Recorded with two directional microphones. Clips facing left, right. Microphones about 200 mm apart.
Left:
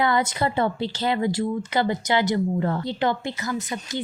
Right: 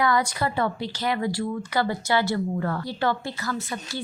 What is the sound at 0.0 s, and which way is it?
Speech, 25° left (ahead or behind).